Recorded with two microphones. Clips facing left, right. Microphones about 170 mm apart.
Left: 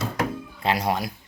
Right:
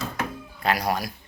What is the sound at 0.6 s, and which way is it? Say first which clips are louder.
Speech: even; 25° left (ahead or behind).